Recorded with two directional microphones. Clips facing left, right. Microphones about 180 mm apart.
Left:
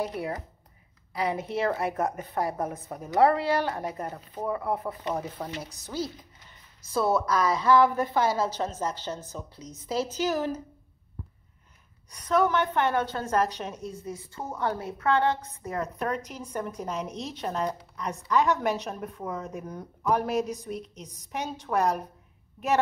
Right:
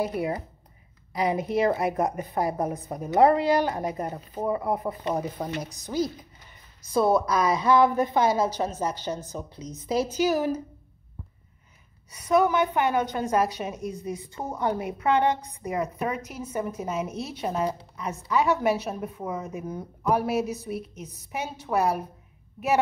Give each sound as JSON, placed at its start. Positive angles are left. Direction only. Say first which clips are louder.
{"t": 0.0, "sound": "a woman's voice", "louder": "right 4 dB", "side_deg": -15}
{"t": 12.1, "sound": "a woman's voice", "louder": "right 2 dB", "side_deg": -10}